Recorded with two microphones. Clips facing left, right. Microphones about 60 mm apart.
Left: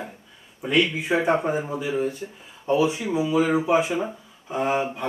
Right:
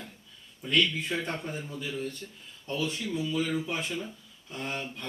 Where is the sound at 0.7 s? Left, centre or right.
Centre.